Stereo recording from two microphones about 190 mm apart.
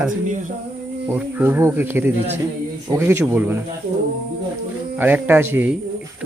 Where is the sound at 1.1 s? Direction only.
10° right (ahead or behind).